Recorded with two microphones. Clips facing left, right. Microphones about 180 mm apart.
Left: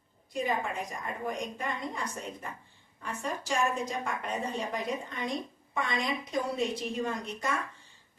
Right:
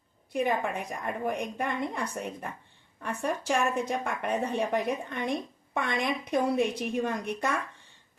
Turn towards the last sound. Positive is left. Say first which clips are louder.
# right 3 dB
turn(degrees=-65)  # may be behind; listen again after turning